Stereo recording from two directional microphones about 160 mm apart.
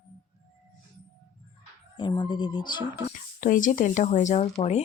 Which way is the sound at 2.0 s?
30° left (ahead or behind).